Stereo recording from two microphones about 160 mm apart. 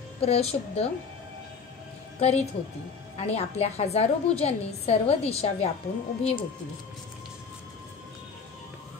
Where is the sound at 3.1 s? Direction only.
40° left (ahead or behind).